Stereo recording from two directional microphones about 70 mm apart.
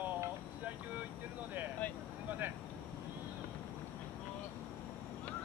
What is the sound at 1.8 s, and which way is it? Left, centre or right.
Vehicle, left.